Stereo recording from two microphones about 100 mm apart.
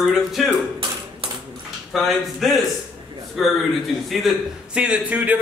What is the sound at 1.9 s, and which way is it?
A man's voice, centre (ahead or behind).